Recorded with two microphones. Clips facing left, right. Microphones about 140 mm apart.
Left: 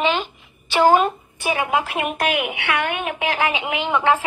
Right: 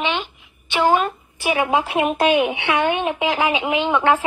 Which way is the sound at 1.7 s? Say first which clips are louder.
Right 3 dB; 30° right (ahead or behind).